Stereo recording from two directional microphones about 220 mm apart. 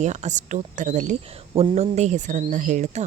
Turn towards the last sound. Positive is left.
turn(degrees=-35)  # may be behind; listen again after turning